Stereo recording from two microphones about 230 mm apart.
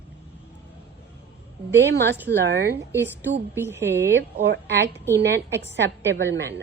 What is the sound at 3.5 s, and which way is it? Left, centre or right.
Speech, centre.